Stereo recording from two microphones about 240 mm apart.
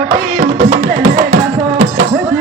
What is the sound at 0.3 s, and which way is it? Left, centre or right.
Music, right.